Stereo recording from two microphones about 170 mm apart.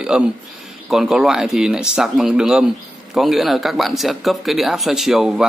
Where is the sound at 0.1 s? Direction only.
5° right (ahead or behind).